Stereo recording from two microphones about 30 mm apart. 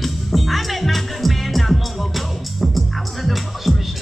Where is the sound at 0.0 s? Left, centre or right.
Centre.